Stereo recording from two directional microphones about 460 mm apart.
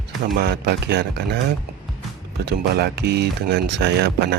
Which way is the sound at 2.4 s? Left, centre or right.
Right.